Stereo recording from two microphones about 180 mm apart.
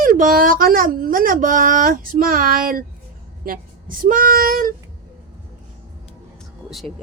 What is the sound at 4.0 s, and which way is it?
Speech, 50° right (ahead or behind).